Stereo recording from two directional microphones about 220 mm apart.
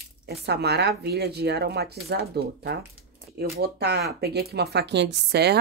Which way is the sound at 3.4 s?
45° right (ahead or behind).